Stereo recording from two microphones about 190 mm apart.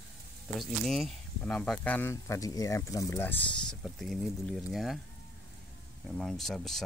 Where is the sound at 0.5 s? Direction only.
Centre (ahead or behind).